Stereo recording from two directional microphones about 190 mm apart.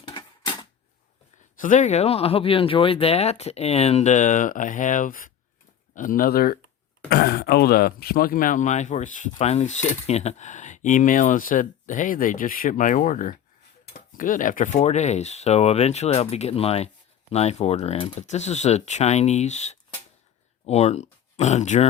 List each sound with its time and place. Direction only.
0.1 s typewriter: 25° left (ahead or behind)
1.5 s speech: 45° left (ahead or behind)
20.7 s speech: 35° left (ahead or behind)